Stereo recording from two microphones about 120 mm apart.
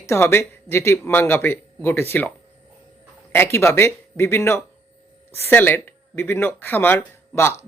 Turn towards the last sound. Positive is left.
turn(degrees=20)  # may be behind; listen again after turning